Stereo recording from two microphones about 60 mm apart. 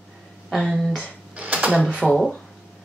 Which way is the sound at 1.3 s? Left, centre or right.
Right.